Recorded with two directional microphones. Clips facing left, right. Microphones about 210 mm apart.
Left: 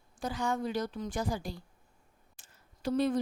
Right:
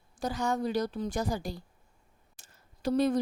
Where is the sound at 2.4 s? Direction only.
40° right (ahead or behind).